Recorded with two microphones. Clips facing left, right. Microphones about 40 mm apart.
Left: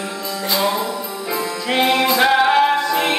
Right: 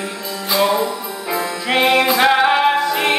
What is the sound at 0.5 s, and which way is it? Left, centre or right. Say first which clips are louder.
Music: right 4 dB; centre.